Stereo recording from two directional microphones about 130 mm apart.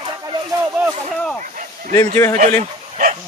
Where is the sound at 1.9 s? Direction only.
25° left (ahead or behind).